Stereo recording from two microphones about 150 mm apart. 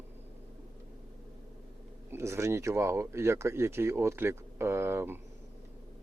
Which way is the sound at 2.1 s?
20° right (ahead or behind).